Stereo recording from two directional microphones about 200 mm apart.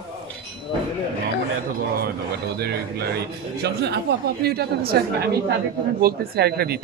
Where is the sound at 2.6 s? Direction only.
55° right (ahead or behind).